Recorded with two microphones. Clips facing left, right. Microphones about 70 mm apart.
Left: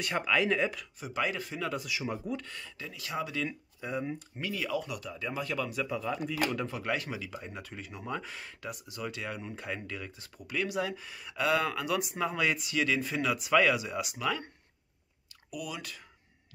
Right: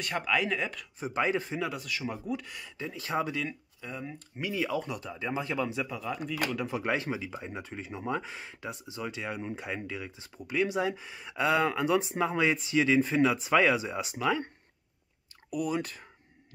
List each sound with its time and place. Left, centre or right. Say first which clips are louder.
0.0 s speech: left 1 dB; centre
0.9 s speech: right 4 dB; right
1.9 s speech: right 1 dB; centre
2.8 s speech: right 5 dB; right
3.4 s speech: left 2 dB; centre
4.4 s speech: right 3 dB; right
5.9 s speech: left 1 dB; centre
6.7 s speech: right 3 dB; right
15.5 s speech: right 8 dB; right